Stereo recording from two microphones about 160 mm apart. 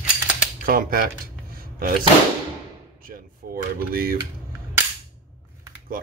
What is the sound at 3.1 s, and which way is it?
Drawer open or close, 65° right (ahead or behind).